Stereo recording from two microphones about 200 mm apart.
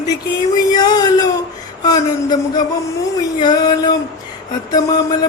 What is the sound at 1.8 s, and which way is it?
Speech, 20° left (ahead or behind).